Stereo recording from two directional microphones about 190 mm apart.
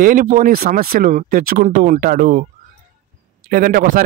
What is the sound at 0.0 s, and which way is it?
Speech, 45° right (ahead or behind).